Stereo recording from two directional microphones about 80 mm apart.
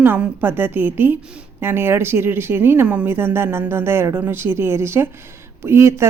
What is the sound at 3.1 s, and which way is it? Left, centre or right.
A man's voice, right.